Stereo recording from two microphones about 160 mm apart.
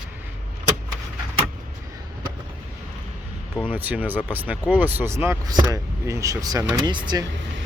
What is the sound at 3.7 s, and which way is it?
Speech, 10° right (ahead or behind).